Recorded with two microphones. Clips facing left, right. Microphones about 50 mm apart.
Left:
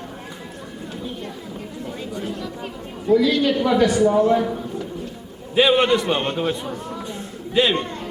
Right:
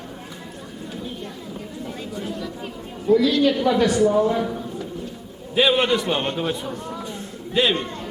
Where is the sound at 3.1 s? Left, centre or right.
Centre.